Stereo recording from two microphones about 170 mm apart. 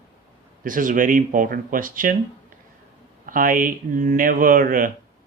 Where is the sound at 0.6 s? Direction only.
50° right (ahead or behind).